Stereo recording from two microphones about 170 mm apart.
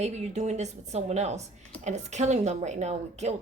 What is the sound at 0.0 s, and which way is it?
A woman's voice, 40° right (ahead or behind).